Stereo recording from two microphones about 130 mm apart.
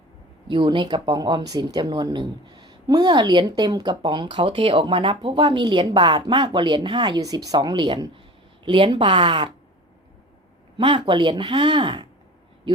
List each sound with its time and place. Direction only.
0.4 s speech: 40° right (ahead or behind)
10.8 s speech: 40° right (ahead or behind)